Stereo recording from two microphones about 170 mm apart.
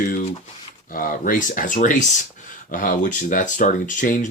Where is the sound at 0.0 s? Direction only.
55° left (ahead or behind).